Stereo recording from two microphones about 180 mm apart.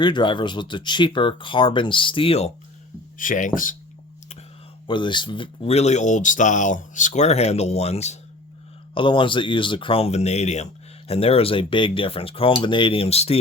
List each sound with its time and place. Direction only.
0.0 s speech: 25° left (ahead or behind)
3.2 s speech: 45° left (ahead or behind)
4.9 s speech: 25° left (ahead or behind)